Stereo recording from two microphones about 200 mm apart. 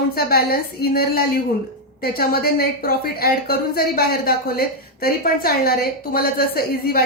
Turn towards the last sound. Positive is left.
turn(degrees=50)  # may be behind; listen again after turning